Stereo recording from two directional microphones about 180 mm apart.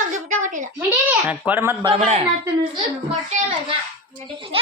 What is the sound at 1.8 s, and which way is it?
Speech, 35° right (ahead or behind).